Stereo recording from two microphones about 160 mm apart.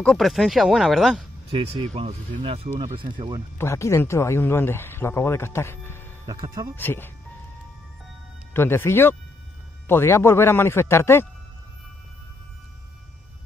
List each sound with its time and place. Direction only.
0.0 s speech: 5° left (ahead or behind)
1.5 s speech: 40° right (ahead or behind)
3.5 s speech: 15° left (ahead or behind)
6.2 s speech: 20° right (ahead or behind)
6.8 s speech: 15° left (ahead or behind)
8.5 s speech: 15° left (ahead or behind)